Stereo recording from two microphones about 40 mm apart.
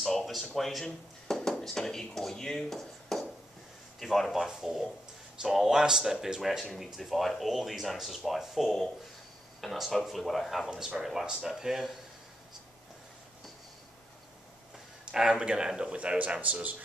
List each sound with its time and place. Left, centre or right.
0.0 s speech: centre
2.8 s a sound: centre
4.0 s speech: centre
10.7 s speech: right
11.4 s speech: centre
15.1 s speech: centre